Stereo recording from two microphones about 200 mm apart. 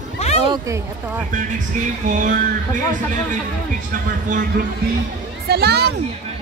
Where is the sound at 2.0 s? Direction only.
40° right (ahead or behind).